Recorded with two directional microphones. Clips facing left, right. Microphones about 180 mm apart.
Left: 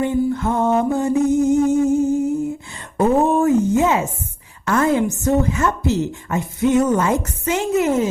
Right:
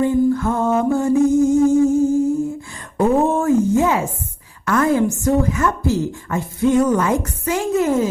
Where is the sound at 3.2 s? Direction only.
15° left (ahead or behind).